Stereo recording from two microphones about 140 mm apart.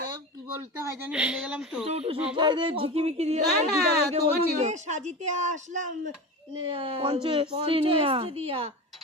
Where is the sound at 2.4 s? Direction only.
35° right (ahead or behind); by 5.9 s 60° right (ahead or behind).